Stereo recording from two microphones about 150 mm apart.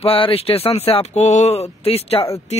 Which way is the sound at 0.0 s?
40° left (ahead or behind).